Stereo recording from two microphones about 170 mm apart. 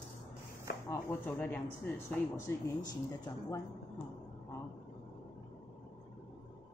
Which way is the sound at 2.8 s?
25° left (ahead or behind).